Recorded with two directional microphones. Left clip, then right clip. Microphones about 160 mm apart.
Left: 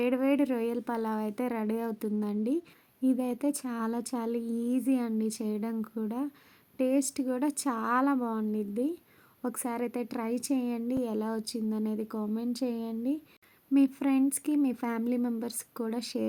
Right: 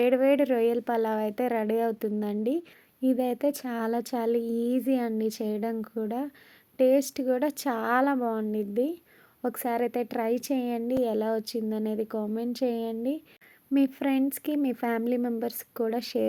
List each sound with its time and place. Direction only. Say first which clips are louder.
0.0 s a woman's voice: right 6 dB; 20° right (ahead or behind)